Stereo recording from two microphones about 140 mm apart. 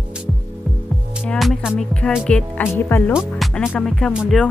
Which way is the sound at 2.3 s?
15° left (ahead or behind).